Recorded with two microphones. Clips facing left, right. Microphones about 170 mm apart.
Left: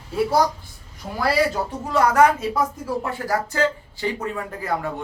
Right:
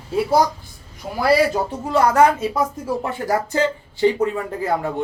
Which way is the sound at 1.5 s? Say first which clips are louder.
Right 4 dB; 30° right (ahead or behind).